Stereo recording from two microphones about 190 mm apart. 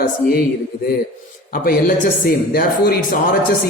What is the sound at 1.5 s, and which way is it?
A woman's voice, 50° left (ahead or behind).